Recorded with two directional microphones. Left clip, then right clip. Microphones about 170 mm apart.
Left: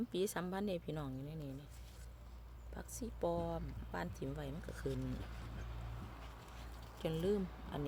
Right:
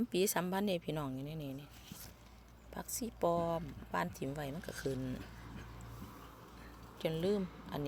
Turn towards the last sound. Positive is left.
turn(degrees=5)  # may be behind; listen again after turning